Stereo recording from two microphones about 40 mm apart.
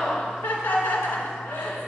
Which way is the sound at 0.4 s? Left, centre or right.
Left.